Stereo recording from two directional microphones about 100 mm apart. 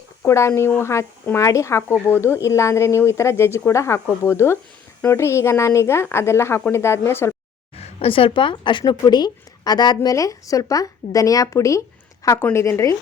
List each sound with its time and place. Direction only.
0.3 s speech: 25° left (ahead or behind)
7.8 s a woman's voice: 90° left; by 13.0 s 30° left (ahead or behind)